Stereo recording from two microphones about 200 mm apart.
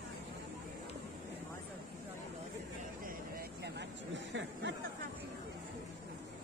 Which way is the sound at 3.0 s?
50° right (ahead or behind).